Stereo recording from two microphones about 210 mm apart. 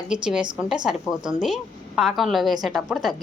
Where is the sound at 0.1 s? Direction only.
5° right (ahead or behind).